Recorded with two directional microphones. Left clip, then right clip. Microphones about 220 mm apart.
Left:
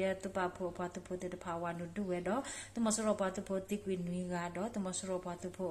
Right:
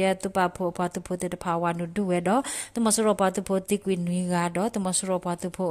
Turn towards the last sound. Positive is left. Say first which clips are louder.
# right 12 dB
turn(degrees=-45)  # may be behind; listen again after turning